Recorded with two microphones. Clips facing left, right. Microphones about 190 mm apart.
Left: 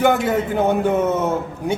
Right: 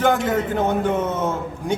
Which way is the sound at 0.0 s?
10° left (ahead or behind).